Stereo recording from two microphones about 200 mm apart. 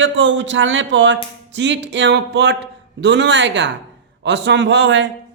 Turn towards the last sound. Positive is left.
turn(degrees=-65)  # may be behind; listen again after turning